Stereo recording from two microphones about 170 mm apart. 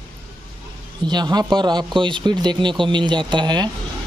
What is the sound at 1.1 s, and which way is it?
Speech, 25° right (ahead or behind).